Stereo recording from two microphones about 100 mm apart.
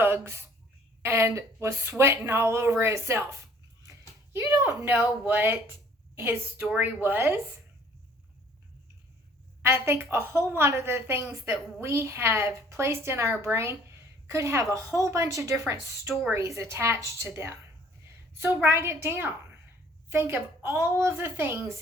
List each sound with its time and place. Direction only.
0.0 s a woman's voice: 25° right (ahead or behind)
9.6 s a woman's voice: 25° right (ahead or behind)